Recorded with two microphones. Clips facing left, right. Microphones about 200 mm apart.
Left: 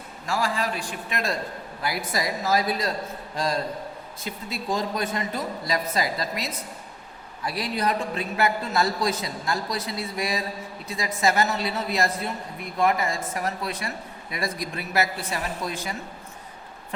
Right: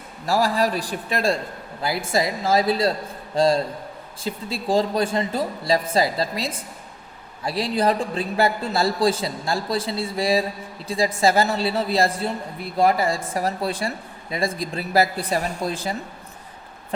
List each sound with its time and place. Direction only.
0.3 s a woman's voice: 40° right (ahead or behind)